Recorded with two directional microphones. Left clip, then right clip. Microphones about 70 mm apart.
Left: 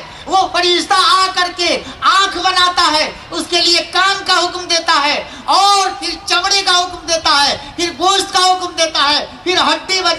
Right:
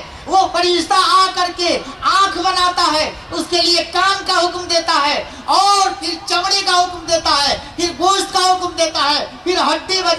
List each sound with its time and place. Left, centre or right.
0.3 s a man's voice: left